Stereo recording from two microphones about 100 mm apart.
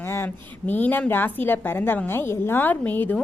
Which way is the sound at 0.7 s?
15° left (ahead or behind).